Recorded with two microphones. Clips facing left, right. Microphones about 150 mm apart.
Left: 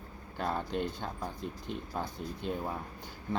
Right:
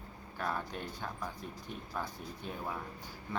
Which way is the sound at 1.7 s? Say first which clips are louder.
Left 6 dB; 80° left.